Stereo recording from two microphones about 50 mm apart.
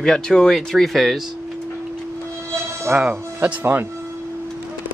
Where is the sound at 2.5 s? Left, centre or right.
Right.